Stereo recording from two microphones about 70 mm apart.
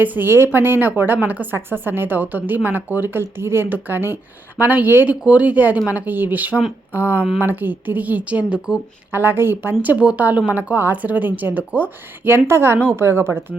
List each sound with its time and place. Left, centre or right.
0.0 s speech: right
9.1 s a woman's voice: right
10.0 s speech: centre; by 13.4 s right